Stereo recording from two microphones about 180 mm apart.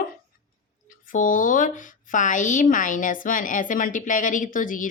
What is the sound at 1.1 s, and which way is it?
Speech, 45° left (ahead or behind).